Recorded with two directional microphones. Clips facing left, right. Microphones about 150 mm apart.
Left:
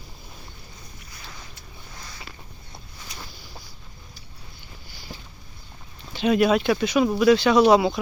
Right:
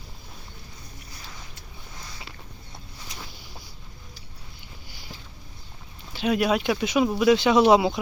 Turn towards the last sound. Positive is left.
turn(degrees=-20)  # may be behind; listen again after turning